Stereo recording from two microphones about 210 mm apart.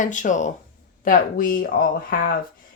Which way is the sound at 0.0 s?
35° left (ahead or behind).